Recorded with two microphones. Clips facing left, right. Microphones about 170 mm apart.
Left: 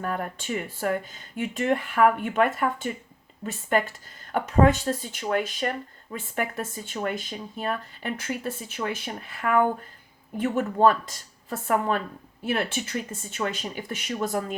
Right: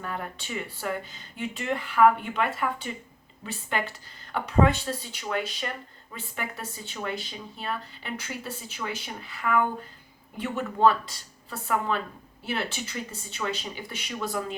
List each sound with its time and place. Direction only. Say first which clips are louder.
0.0 s speech: left 5 dB; 50° left (ahead or behind)